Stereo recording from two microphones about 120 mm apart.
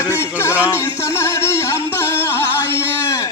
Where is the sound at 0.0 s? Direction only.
20° left (ahead or behind).